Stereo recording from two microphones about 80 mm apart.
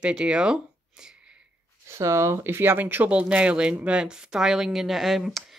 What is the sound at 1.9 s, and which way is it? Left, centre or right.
Speech, right.